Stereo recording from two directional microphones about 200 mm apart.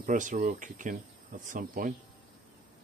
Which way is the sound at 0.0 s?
40° right (ahead or behind).